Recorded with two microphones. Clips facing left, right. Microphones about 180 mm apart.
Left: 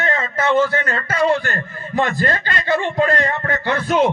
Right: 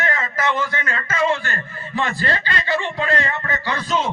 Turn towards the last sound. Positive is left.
turn(degrees=60)  # may be behind; listen again after turning